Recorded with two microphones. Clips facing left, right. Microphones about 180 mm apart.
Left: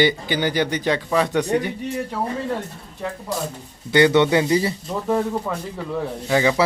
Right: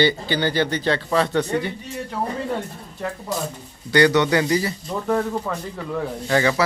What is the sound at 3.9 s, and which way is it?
Speech, 20° left (ahead or behind).